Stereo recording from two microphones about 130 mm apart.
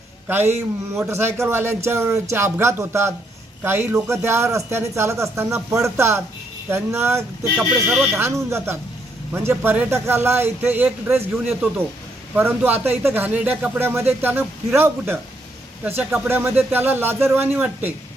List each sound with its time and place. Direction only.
0.3 s a man's voice: 15° right (ahead or behind)
7.5 s a man's voice: 10° right (ahead or behind)